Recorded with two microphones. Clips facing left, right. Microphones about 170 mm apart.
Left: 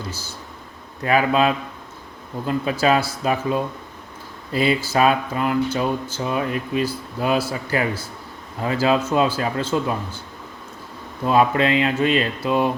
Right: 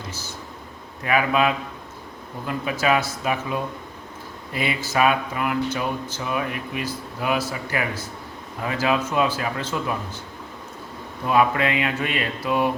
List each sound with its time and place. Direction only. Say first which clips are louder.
1.0 s speech: left 3 dB; 30° left (ahead or behind)
11.3 s speech: left 3 dB; 30° left (ahead or behind)